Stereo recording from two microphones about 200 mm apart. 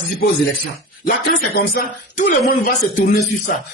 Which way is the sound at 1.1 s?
50° left (ahead or behind).